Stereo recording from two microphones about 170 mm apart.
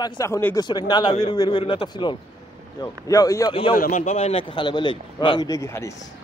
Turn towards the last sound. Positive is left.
turn(degrees=15)  # may be behind; listen again after turning